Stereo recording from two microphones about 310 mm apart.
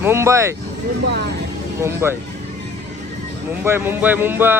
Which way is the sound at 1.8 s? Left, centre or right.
Centre.